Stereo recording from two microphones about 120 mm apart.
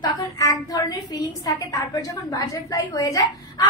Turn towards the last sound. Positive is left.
turn(degrees=30)  # may be behind; listen again after turning